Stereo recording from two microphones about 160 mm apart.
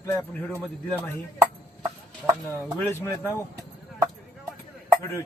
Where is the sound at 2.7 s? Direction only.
15° left (ahead or behind).